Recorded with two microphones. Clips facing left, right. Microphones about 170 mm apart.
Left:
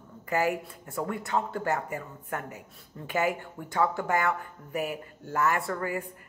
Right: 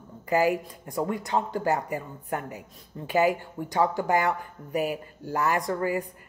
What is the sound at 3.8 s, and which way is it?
Speech, 35° right (ahead or behind).